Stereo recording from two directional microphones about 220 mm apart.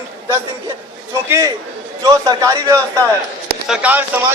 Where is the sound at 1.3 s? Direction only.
15° right (ahead or behind).